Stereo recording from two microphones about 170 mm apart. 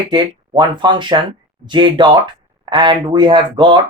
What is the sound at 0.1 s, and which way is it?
Speech, 25° right (ahead or behind).